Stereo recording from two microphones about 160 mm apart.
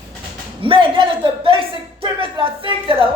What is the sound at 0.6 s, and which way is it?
Speech, 35° right (ahead or behind).